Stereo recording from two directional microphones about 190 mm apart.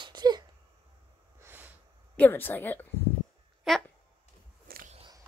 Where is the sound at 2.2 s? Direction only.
10° left (ahead or behind).